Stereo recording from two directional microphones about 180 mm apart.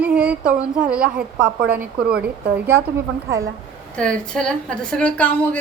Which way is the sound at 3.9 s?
5° left (ahead or behind).